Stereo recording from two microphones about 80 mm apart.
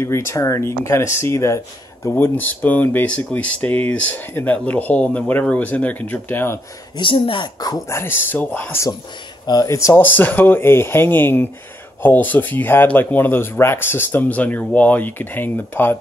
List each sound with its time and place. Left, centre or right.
0.0 s speech: left
2.0 s speech: left
7.0 s a woman's voice: left
7.9 s speech: left
9.5 s speech: left
9.9 s speech: left